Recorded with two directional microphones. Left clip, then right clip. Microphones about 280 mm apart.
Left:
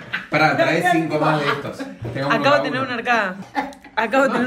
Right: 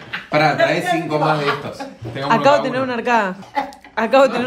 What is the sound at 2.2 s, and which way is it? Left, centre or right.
A man's voice, right.